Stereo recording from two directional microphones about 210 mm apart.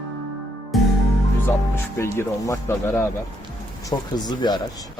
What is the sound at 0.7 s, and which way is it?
Music, centre (ahead or behind).